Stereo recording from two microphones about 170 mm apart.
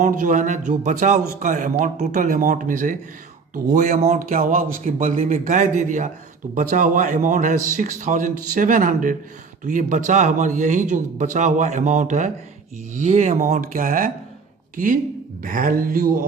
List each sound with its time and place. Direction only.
0.0 s speech: 50° right (ahead or behind)
15.4 s speech: 55° right (ahead or behind)